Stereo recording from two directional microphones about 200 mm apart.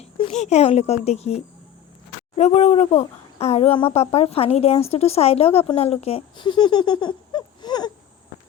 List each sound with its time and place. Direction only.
0.0 s speech: 30° left (ahead or behind)